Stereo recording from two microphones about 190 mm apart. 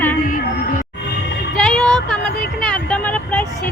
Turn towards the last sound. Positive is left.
turn(degrees=10)  # may be behind; listen again after turning